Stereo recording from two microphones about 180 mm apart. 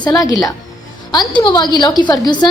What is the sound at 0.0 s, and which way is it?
A woman's voice, 20° left (ahead or behind).